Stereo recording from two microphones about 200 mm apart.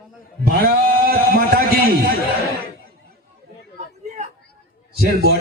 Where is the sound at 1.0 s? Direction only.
50° right (ahead or behind).